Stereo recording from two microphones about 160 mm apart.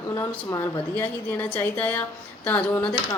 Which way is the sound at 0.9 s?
10° left (ahead or behind).